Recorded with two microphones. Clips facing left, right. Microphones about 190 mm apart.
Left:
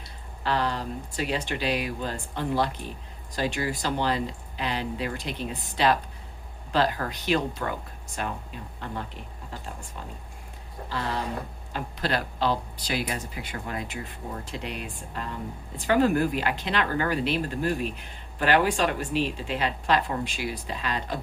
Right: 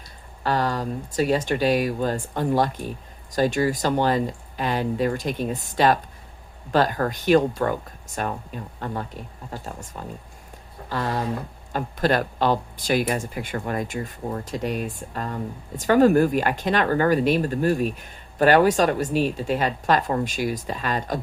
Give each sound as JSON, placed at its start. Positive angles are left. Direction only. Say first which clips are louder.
{"t": 0.4, "sound": "speech", "louder": "right 4 dB", "side_deg": -45}
{"t": 10.8, "sound": "speech", "louder": "right 5 dB", "side_deg": -50}